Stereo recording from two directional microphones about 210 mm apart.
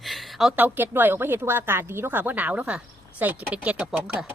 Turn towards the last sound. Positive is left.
turn(degrees=-5)  # may be behind; listen again after turning